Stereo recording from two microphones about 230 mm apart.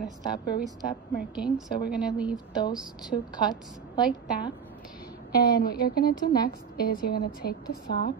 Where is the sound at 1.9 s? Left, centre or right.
Centre.